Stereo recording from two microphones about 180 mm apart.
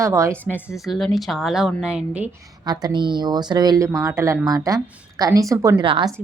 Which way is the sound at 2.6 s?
20° right (ahead or behind).